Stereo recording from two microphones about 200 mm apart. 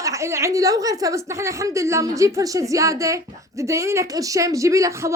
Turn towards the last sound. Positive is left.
turn(degrees=-15)  # may be behind; listen again after turning